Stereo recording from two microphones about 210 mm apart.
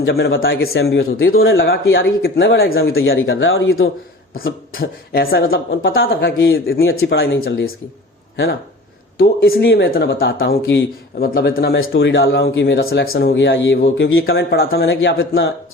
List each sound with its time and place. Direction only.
0.0 s speech: 50° left (ahead or behind)
1.2 s speech: 75° left (ahead or behind)
2.2 s speech: 50° left (ahead or behind)
2.9 s speech: 70° left (ahead or behind)
4.4 s speech: 45° left (ahead or behind)
5.8 s speech: 70° left (ahead or behind)
6.1 s speech: 55° left (ahead or behind)
9.1 s speech: 50° left (ahead or behind)
14.8 s speech: 60° left (ahead or behind)